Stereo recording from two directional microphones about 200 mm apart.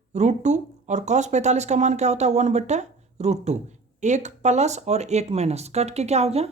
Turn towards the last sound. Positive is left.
turn(degrees=-30)  # may be behind; listen again after turning